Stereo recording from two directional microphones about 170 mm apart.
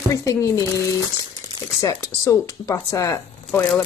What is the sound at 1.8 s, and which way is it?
Speech, 20° left (ahead or behind).